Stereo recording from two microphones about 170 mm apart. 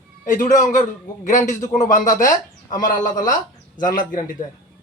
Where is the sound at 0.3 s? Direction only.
50° left (ahead or behind).